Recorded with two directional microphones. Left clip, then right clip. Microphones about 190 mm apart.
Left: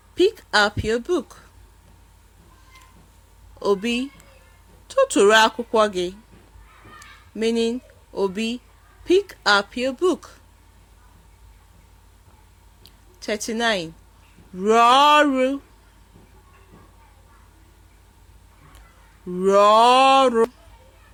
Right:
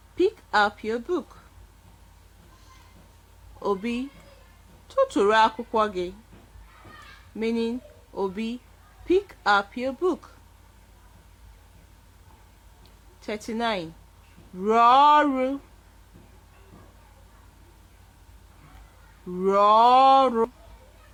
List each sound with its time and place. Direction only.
0.2 s a woman's voice: 20° left (ahead or behind)
3.6 s speech: 20° left (ahead or behind)
7.3 s speech: 25° left (ahead or behind)
12.8 s a sound: 20° left (ahead or behind)
14.6 s speech: 20° left (ahead or behind)
19.4 s speech: 20° left (ahead or behind)